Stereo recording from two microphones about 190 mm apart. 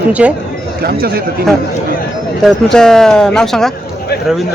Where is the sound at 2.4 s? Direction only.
5° left (ahead or behind).